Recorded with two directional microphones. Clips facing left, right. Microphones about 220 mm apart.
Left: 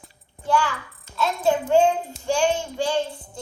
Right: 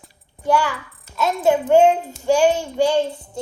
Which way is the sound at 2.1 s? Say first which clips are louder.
Right 6 dB; 45° right (ahead or behind).